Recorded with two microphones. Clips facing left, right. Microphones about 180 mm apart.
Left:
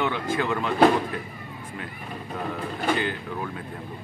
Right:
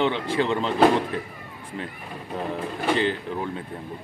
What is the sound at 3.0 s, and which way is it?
Speech, 25° right (ahead or behind).